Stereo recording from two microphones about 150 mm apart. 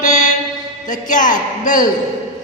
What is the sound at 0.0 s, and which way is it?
Mantra, 55° left (ahead or behind).